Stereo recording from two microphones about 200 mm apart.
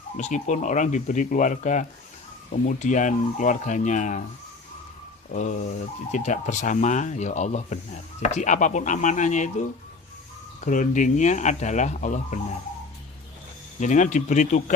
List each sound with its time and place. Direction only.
0.2 s speech: 35° left (ahead or behind)
5.3 s speech: 35° left (ahead or behind)
13.7 s speech: 35° left (ahead or behind)